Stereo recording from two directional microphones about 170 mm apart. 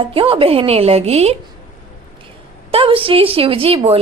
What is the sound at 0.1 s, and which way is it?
A woman's voice, 35° right (ahead or behind).